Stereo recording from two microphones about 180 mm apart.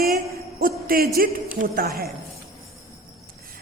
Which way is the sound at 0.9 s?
55° right (ahead or behind).